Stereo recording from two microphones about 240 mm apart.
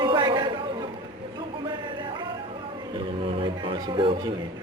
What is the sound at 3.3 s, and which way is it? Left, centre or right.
Music, right.